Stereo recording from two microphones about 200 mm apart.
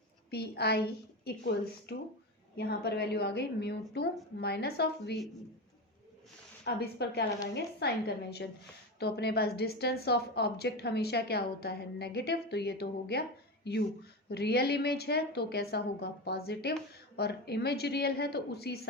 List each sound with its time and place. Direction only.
0.3 s a woman's voice: 55° left (ahead or behind)
6.7 s a woman's voice: 55° left (ahead or behind)